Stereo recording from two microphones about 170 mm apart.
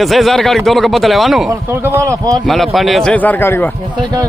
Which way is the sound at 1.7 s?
15° right (ahead or behind).